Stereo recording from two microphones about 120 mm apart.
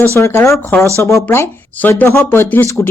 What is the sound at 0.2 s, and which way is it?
A woman's voice, 20° left (ahead or behind).